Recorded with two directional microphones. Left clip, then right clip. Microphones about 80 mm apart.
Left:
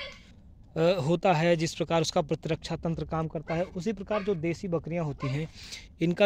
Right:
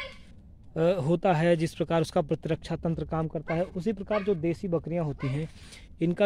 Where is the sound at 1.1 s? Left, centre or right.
Right.